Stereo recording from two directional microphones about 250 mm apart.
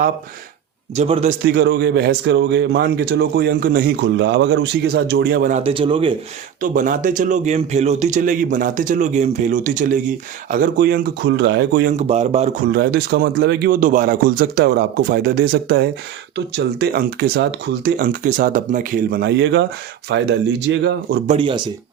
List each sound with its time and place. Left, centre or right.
0.9 s speech: right
1.5 s speech: right
6.6 s speech: right
12.6 s speech: right
21.2 s speech: right